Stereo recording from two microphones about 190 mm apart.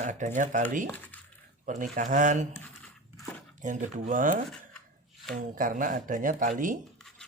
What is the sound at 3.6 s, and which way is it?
Speech, 40° right (ahead or behind).